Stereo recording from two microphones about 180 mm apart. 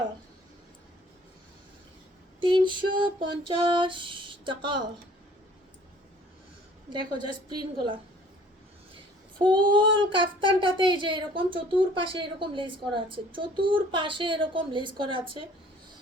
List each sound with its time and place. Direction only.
2.4 s speech: 25° right (ahead or behind)
6.9 s speech: 25° right (ahead or behind)
9.4 s speech: 25° right (ahead or behind)